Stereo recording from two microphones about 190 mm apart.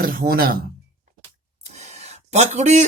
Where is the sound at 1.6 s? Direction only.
35° right (ahead or behind).